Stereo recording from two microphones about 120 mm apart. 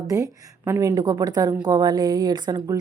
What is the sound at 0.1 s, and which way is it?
A woman's voice, 25° right (ahead or behind).